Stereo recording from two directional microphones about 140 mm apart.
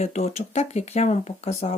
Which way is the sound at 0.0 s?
55° left (ahead or behind).